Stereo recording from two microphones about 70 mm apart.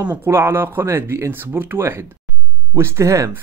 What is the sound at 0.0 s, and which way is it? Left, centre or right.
Speech, right.